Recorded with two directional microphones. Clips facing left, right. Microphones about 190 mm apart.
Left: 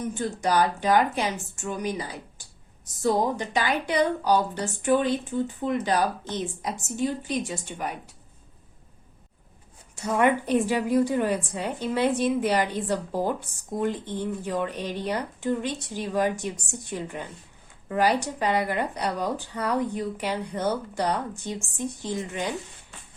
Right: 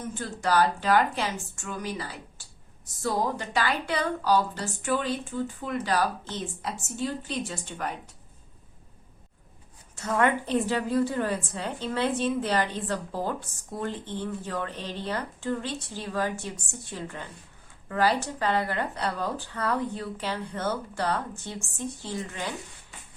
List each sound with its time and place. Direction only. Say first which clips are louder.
0.1 s a woman's voice: even; 15° left (ahead or behind)
9.9 s a woman's voice: left 2 dB; 15° left (ahead or behind)